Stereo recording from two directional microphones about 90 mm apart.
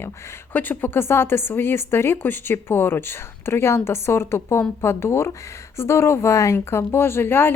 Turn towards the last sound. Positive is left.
turn(degrees=25)  # may be behind; listen again after turning